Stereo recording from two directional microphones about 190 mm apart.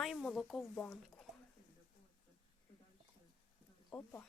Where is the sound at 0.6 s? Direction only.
10° left (ahead or behind).